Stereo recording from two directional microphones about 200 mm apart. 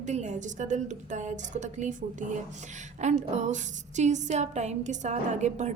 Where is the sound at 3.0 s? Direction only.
35° right (ahead or behind).